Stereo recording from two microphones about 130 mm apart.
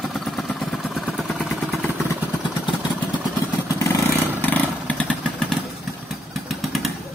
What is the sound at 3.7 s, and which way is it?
Motorcycle, 25° left (ahead or behind).